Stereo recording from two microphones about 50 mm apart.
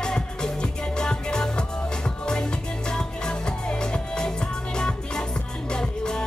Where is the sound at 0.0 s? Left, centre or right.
Centre.